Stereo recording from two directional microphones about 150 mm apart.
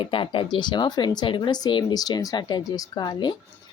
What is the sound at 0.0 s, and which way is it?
Speech, 35° left (ahead or behind).